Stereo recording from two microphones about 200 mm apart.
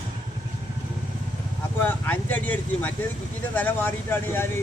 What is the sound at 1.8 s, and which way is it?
Speech, 10° left (ahead or behind).